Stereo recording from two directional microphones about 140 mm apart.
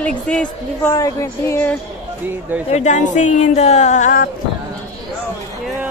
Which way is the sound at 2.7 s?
60° left (ahead or behind).